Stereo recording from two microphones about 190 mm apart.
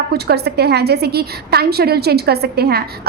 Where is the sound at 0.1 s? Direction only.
60° right (ahead or behind).